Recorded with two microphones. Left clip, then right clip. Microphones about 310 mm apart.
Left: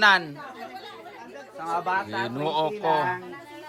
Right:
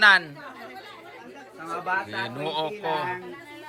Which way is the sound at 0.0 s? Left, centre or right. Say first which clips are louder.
Right 2 dB; centre.